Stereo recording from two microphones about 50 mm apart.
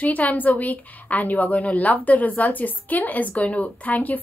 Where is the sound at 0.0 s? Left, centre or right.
Left.